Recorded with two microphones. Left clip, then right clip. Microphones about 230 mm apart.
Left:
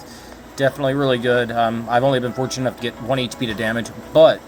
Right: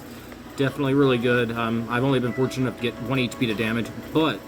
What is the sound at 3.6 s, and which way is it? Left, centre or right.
Speech, centre.